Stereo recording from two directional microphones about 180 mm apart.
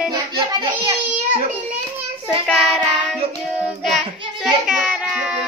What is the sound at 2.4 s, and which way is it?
Child singing, centre (ahead or behind).